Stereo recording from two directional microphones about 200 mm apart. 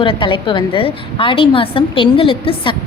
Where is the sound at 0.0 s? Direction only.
25° left (ahead or behind).